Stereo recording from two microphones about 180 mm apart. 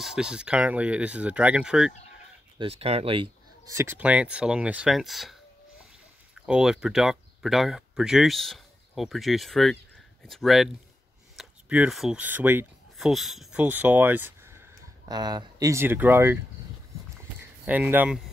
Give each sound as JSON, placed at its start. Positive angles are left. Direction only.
{"t": 0.0, "sound": "speech", "side_deg": -5}
{"t": 2.6, "sound": "speech", "side_deg": -35}
{"t": 3.6, "sound": "speech", "side_deg": -15}
{"t": 6.4, "sound": "speech", "side_deg": -5}
{"t": 17.2, "sound": "a sound", "side_deg": -10}